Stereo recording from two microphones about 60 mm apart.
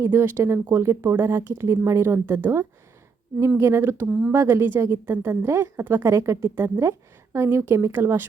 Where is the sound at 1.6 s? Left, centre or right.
Right.